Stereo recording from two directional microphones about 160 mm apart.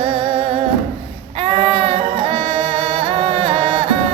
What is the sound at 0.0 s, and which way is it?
Music, 35° right (ahead or behind).